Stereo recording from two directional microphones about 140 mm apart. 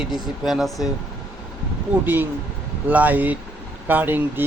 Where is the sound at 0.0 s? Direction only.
5° right (ahead or behind).